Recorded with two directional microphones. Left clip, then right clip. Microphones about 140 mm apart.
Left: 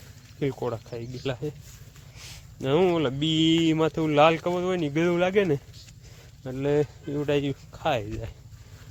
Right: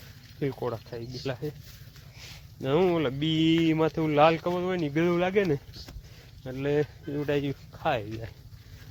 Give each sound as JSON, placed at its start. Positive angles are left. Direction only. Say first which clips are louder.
{"t": 0.3, "sound": "speech", "louder": "left 2 dB", "side_deg": 30}